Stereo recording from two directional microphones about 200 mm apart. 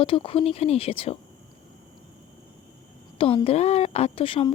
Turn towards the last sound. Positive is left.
turn(degrees=25)  # may be behind; listen again after turning